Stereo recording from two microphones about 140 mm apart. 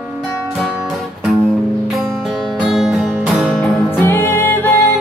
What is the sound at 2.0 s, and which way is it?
Music, centre (ahead or behind).